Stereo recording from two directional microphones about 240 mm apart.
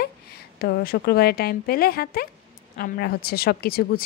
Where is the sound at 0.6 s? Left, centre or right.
Left.